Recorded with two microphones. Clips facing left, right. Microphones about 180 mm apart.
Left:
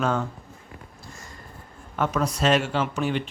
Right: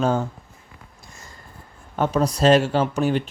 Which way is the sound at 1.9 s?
30° right (ahead or behind).